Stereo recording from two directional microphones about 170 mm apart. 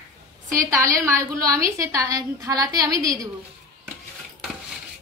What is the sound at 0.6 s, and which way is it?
A woman's voice, 20° right (ahead or behind).